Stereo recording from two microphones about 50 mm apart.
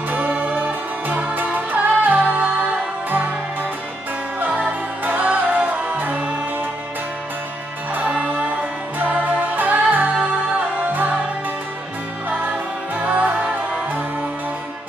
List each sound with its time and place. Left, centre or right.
0.1 s music: right
4.4 s music: right
8.0 s music: right
12.3 s music: right